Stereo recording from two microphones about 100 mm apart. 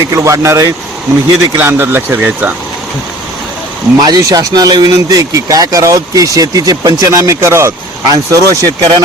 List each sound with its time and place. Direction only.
0.1 s speech: 30° right (ahead or behind)
4.0 s speech: 40° right (ahead or behind)